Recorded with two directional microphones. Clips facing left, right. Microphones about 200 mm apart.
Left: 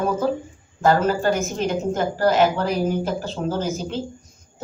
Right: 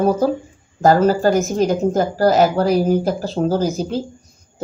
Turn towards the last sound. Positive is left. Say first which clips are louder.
# right 6 dB
turn(degrees=-35)  # may be behind; listen again after turning